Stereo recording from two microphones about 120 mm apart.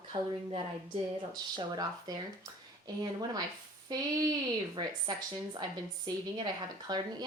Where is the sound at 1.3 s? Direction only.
35° right (ahead or behind).